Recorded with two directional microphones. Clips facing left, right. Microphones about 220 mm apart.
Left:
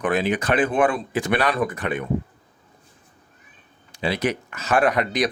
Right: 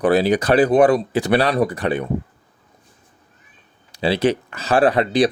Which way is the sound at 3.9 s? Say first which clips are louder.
Right 6 dB; 35° right (ahead or behind).